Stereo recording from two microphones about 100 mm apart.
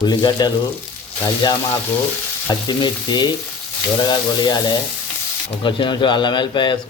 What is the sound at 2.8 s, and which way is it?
Speech, 45° left (ahead or behind).